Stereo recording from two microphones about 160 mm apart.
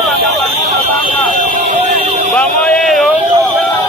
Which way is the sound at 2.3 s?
5° left (ahead or behind).